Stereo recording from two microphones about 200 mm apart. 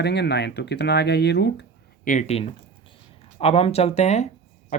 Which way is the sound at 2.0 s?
35° left (ahead or behind).